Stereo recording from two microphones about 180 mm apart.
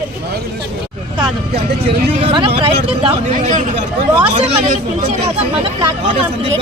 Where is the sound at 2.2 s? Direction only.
30° right (ahead or behind).